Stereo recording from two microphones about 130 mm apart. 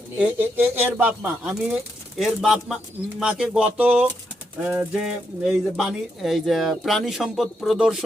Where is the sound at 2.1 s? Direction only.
Centre (ahead or behind).